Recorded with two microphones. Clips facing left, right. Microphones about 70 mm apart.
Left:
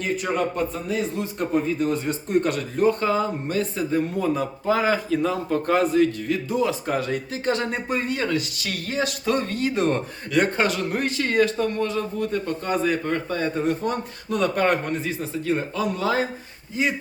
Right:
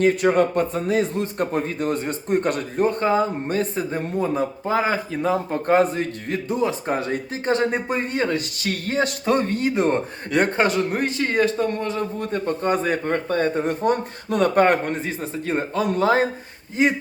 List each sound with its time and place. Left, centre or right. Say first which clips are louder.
0.0 s a man's voice: right 7 dB; right